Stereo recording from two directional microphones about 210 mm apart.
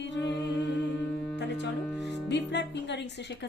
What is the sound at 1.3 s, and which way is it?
Music, 55° left (ahead or behind).